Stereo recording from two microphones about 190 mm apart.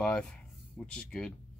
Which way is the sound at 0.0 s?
5° left (ahead or behind).